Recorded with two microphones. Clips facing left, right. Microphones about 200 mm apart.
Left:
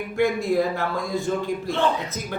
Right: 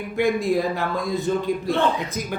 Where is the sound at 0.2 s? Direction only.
15° right (ahead or behind).